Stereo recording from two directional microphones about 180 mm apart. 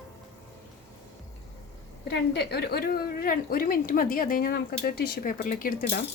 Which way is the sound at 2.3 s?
65° left (ahead or behind).